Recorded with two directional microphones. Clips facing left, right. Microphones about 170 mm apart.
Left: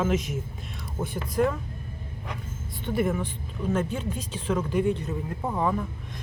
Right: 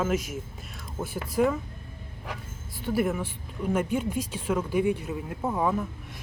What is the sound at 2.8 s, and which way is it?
Speech, 5° right (ahead or behind).